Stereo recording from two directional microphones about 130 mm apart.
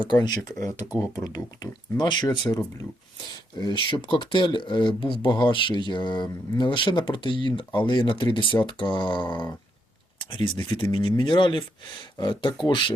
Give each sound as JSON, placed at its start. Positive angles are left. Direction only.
{"t": 0.0, "sound": "speech", "side_deg": 35}
{"t": 10.2, "sound": "speech", "side_deg": 40}